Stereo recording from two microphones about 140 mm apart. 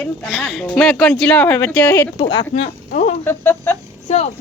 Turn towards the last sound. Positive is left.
turn(degrees=50)  # may be behind; listen again after turning